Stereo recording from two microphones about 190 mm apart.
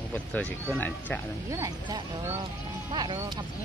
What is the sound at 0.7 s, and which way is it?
Speech, 10° left (ahead or behind).